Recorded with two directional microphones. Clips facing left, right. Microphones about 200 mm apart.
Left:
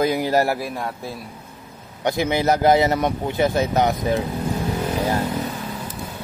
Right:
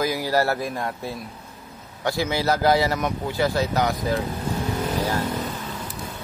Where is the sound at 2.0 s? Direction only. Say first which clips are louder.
Left 3 dB; 20° left (ahead or behind).